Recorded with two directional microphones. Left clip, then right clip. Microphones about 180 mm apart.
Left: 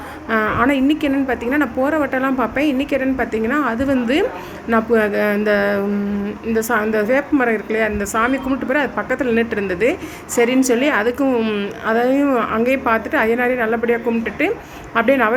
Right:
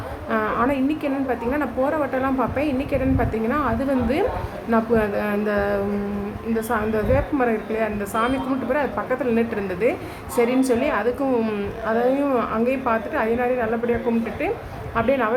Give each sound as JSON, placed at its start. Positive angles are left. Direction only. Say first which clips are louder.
{"t": 0.3, "sound": "a woman's voice", "louder": "left 5 dB", "side_deg": 20}